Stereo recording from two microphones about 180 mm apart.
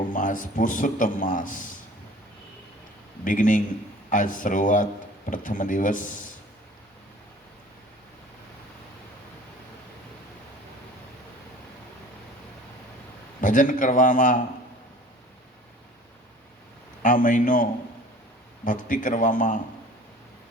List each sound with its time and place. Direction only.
0.1 s a man's voice: 45° left (ahead or behind)
3.2 s a man's voice: 45° left (ahead or behind)
13.4 s a man's voice: 45° left (ahead or behind)
17.0 s a man's voice: 45° left (ahead or behind)